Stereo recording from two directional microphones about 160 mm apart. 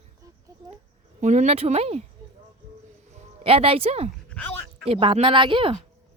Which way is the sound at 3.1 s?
35° right (ahead or behind).